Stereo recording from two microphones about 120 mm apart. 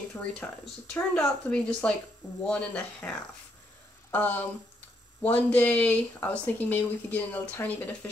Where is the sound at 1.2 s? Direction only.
5° left (ahead or behind).